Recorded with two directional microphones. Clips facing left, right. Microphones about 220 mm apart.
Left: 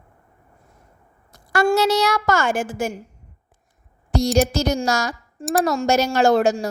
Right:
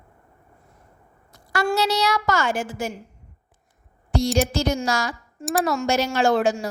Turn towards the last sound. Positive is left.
turn(degrees=40)  # may be behind; listen again after turning